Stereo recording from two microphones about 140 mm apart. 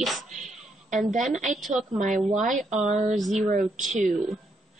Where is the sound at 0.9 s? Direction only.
65° right (ahead or behind).